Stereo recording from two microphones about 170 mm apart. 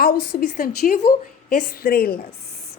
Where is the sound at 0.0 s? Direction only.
60° left (ahead or behind).